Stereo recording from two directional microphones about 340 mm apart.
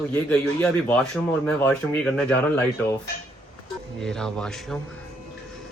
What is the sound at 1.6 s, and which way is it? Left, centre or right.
Speech, centre.